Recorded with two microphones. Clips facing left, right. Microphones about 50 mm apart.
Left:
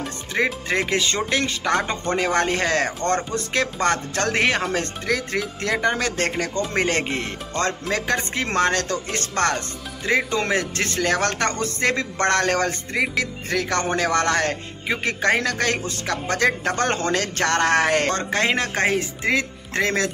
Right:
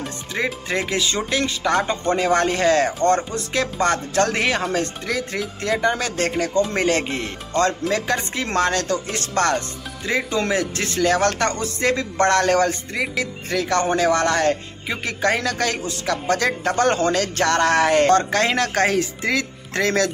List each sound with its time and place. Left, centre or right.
0.3 s speech: left
0.7 s music: left
1.7 s speech: left
3.8 s music: left
6.7 s speech: left
10.0 s music: left
16.1 s speech: left
18.1 s speech: left